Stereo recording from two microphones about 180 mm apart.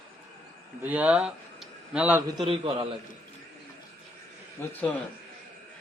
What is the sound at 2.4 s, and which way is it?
Speech, 30° right (ahead or behind).